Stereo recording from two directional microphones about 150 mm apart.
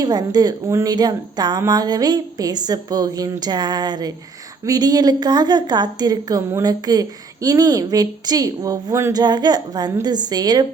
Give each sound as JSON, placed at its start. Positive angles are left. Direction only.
{"t": 0.0, "sound": "a woman's voice", "side_deg": -25}